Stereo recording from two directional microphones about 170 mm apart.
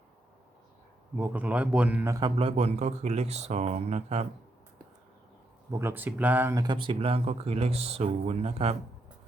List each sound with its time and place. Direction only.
1.1 s a man's voice: 10° right (ahead or behind)
2.3 s speech: 35° right (ahead or behind)
5.7 s speech: 15° right (ahead or behind); by 8.8 s 35° right (ahead or behind)